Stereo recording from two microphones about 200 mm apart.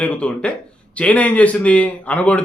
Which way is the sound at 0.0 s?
5° left (ahead or behind).